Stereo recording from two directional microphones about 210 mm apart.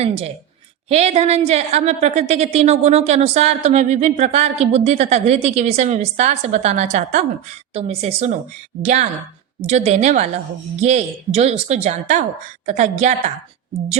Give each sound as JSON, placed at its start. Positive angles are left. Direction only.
{"t": 0.9, "sound": "a woman's voice", "side_deg": -30}